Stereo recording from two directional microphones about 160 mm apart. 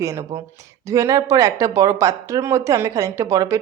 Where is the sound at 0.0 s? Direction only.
20° right (ahead or behind).